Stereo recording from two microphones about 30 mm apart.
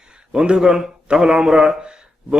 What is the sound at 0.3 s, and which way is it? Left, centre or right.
Speech, right.